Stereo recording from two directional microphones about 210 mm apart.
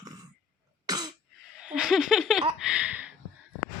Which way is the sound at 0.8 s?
20° right (ahead or behind).